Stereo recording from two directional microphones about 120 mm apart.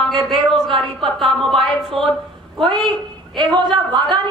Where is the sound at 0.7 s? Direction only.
45° right (ahead or behind).